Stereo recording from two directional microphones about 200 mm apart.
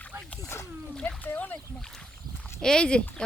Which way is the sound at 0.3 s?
15° left (ahead or behind).